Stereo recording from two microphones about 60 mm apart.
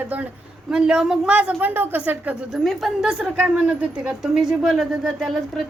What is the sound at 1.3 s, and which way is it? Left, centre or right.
Speech, right.